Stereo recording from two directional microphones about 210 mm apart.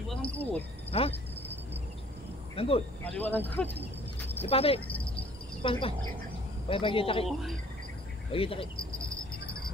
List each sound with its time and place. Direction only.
0.3 s speech: 5° left (ahead or behind)
0.9 s speech: 25° left (ahead or behind)
2.5 s speech: 25° left (ahead or behind)
3.1 s speech: 10° left (ahead or behind)
4.4 s speech: 25° left (ahead or behind)
4.8 s cricket: 5° left (ahead or behind)
5.1 s cricket: 25° left (ahead or behind)
6.7 s speech: 25° left (ahead or behind)
8.3 s speech: 25° left (ahead or behind)